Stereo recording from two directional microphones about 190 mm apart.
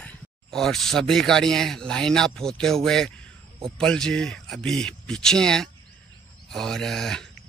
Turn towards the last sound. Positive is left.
turn(degrees=0)  # may be behind; listen again after turning